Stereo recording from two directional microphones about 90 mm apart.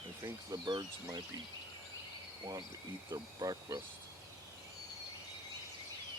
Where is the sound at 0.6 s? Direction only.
55° right (ahead or behind).